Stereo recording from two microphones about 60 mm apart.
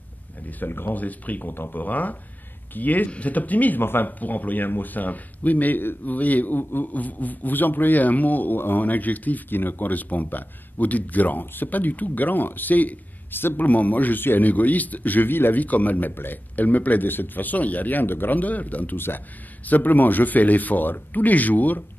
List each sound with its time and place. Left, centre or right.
0.5 s speech: left